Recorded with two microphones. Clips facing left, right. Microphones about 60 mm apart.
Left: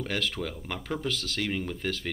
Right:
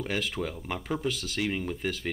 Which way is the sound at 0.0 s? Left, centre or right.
Centre.